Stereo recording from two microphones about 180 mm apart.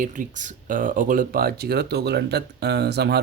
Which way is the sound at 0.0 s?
45° right (ahead or behind).